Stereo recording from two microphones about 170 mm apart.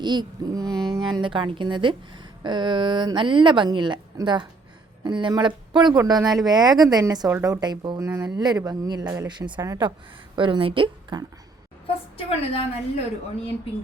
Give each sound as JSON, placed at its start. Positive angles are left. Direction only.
{"t": 0.0, "sound": "speech", "side_deg": -25}
{"t": 12.1, "sound": "a woman's voice", "side_deg": 35}